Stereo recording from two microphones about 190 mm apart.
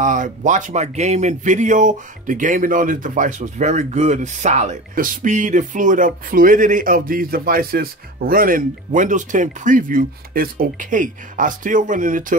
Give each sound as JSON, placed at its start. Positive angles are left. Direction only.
{"t": 0.0, "sound": "speech", "side_deg": -45}